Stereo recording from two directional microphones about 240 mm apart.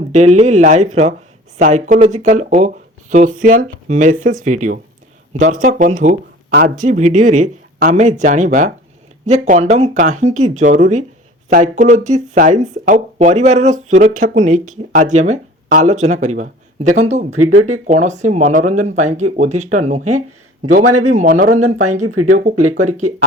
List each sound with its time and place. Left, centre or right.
0.1 s speech: right
6.5 s speech: right
6.8 s speech: right
17.3 s speech: right
17.8 s a man's voice: right
20.8 s speech: right
21.2 s speech: right
21.5 s speech: right